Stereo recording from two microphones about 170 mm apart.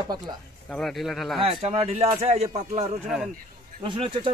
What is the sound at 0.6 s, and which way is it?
Speech, 5° left (ahead or behind).